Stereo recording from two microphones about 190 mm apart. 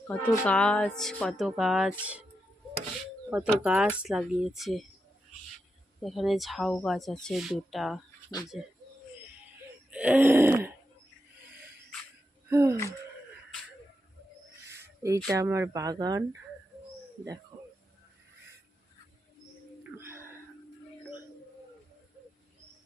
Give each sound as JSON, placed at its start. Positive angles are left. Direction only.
{"t": 0.1, "sound": "speech", "side_deg": 5}
{"t": 3.2, "sound": "speech", "side_deg": -5}
{"t": 6.0, "sound": "speech", "side_deg": 0}
{"t": 9.9, "sound": "groan", "side_deg": -5}
{"t": 12.5, "sound": "a sound", "side_deg": -15}
{"t": 14.7, "sound": "a sound", "side_deg": -15}
{"t": 15.4, "sound": "speech", "side_deg": -15}